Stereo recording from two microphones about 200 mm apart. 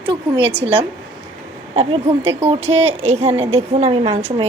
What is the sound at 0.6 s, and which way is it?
A woman's voice, 25° right (ahead or behind).